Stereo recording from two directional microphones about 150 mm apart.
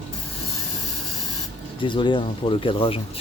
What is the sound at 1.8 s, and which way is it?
Speech, 30° left (ahead or behind).